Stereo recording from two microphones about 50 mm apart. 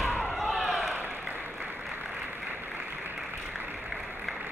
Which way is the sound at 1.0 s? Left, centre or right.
Right.